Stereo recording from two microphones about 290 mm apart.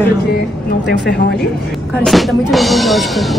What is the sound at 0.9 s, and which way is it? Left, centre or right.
Speech, left.